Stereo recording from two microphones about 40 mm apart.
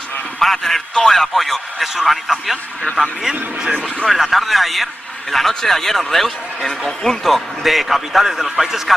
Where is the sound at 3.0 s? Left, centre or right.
Centre.